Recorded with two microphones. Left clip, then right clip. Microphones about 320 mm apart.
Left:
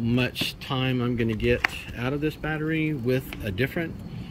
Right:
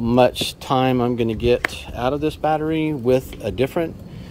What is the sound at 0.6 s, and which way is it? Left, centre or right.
Speech, right.